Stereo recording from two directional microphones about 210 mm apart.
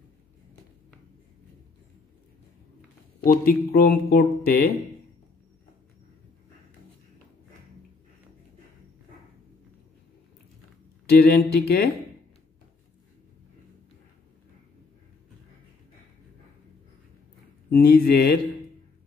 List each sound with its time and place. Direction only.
3.4 s speech: 45° left (ahead or behind)
11.1 s speech: 50° left (ahead or behind)
17.6 s speech: 45° left (ahead or behind)